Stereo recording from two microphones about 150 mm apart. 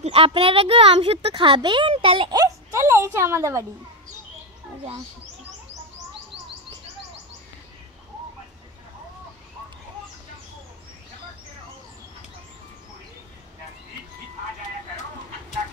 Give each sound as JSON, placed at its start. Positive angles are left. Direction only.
{"t": 0.0, "sound": "speech", "side_deg": -40}
{"t": 2.3, "sound": "a woman's voice", "side_deg": -20}